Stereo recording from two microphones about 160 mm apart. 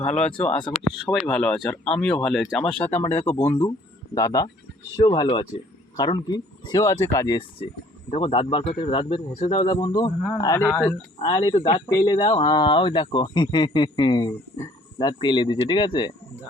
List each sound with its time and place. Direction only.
0.0 s speech: 45° left (ahead or behind)
0.3 s speech: 5° left (ahead or behind)
11.2 s speech: 30° left (ahead or behind)